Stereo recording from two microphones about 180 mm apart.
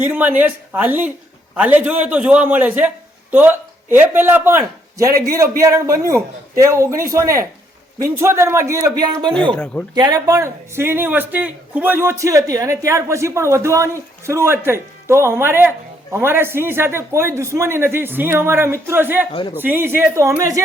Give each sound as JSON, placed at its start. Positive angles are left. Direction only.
{"t": 0.0, "sound": "speech", "side_deg": -10}
{"t": 19.3, "sound": "speech", "side_deg": 25}
{"t": 19.5, "sound": "speech", "side_deg": -10}